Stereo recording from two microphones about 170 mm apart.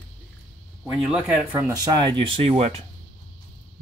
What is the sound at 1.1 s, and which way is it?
Speech, 5° right (ahead or behind).